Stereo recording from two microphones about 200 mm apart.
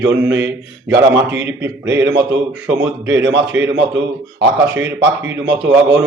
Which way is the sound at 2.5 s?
5° right (ahead or behind).